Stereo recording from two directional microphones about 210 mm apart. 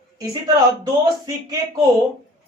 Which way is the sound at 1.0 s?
20° right (ahead or behind).